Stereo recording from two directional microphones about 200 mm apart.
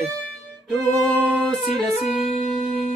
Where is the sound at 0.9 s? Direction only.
Centre (ahead or behind).